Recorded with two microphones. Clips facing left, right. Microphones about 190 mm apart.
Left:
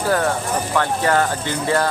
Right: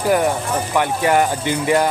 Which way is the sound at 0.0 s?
15° right (ahead or behind).